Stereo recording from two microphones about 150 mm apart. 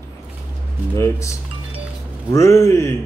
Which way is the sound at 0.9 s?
20° left (ahead or behind).